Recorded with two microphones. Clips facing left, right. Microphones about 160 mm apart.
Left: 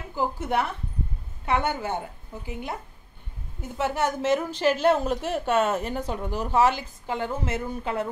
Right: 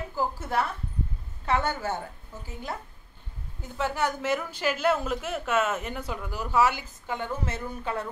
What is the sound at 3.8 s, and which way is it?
A woman's voice, 20° left (ahead or behind).